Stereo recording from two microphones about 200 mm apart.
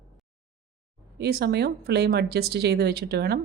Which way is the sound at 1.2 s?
55° right (ahead or behind).